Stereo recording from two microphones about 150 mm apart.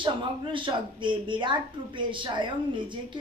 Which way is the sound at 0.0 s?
35° right (ahead or behind).